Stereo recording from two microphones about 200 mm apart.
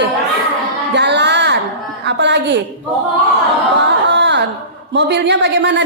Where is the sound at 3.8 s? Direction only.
60° right (ahead or behind).